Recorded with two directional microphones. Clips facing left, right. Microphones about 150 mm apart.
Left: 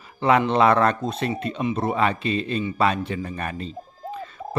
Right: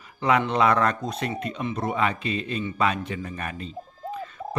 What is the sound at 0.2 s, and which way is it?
Speech, 30° left (ahead or behind).